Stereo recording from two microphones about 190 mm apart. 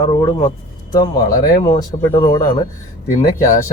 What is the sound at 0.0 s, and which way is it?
Speech, 25° left (ahead or behind).